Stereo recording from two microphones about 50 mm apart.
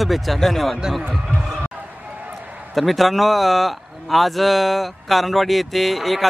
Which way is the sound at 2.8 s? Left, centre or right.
Centre.